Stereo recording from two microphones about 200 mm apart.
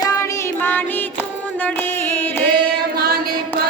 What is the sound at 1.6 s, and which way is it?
Music, 10° left (ahead or behind).